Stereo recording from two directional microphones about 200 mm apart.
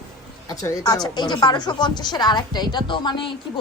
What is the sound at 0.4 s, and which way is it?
A woman's voice, 15° left (ahead or behind).